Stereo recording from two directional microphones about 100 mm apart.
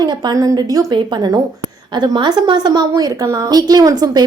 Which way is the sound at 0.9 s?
50° right (ahead or behind).